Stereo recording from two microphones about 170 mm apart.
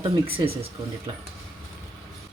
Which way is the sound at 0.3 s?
35° right (ahead or behind).